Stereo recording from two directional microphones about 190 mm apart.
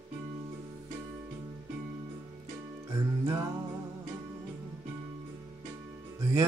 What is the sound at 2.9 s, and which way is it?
Music, 20° right (ahead or behind).